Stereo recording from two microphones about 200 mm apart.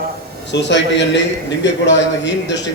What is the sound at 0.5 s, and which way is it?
A man's voice, 60° left (ahead or behind).